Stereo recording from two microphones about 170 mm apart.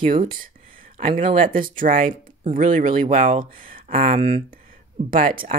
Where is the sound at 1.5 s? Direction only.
55° right (ahead or behind).